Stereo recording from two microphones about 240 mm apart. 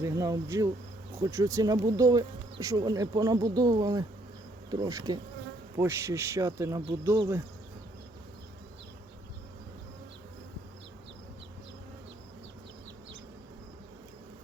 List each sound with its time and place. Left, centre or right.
0.0 s speech: centre